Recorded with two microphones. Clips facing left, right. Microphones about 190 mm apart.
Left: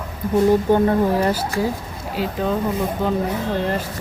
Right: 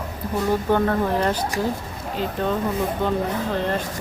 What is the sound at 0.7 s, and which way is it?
Speech, 15° left (ahead or behind).